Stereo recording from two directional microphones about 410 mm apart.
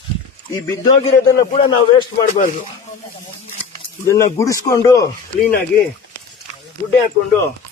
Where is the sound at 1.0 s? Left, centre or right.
Centre.